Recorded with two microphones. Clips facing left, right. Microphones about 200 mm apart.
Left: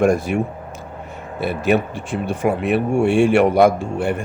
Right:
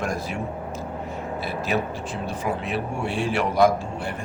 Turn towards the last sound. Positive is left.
turn(degrees=60)  # may be behind; listen again after turning